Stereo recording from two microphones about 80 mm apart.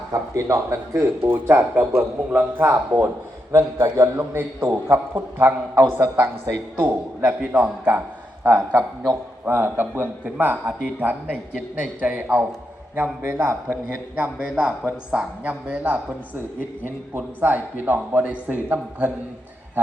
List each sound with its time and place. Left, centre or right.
0.1 s speech: right
1.3 s a man's voice: right
13.0 s speech: right
13.8 s a woman's voice: centre
17.2 s a man's voice: right